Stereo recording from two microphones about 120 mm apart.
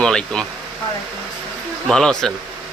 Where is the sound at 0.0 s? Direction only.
5° left (ahead or behind).